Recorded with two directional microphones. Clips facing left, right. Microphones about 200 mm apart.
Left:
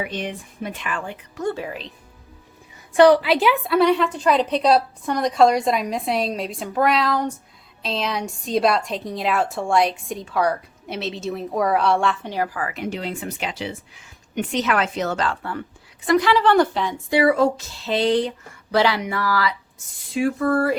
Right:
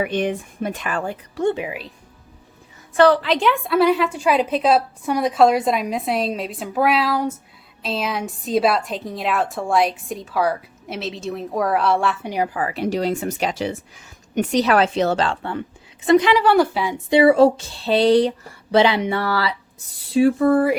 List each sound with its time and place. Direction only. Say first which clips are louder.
0.0 s speech: right 7 dB; 55° right (ahead or behind)
1.5 s a woman's voice: right 4 dB; 15° right (ahead or behind)
2.9 s a woman's voice: left 2 dB; 15° left (ahead or behind); by 12.3 s 5° right (ahead or behind)
12.5 s a woman's voice: right 5 dB; 30° right (ahead or behind); by 17.0 s 10° right (ahead or behind)
17.1 s speech: right 5 dB; 25° right (ahead or behind)
18.7 s speech: right 3 dB; 20° right (ahead or behind)